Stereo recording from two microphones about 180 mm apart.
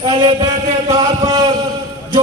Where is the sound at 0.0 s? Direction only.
25° right (ahead or behind).